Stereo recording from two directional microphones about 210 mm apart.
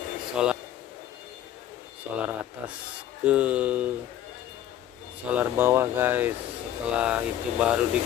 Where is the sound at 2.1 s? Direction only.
5° right (ahead or behind).